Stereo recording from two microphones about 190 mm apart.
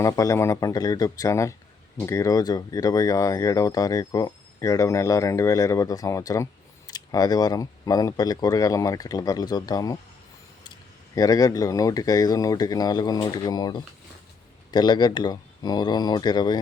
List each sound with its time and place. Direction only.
0.0 s speech: 15° left (ahead or behind)
11.1 s speech: 20° left (ahead or behind)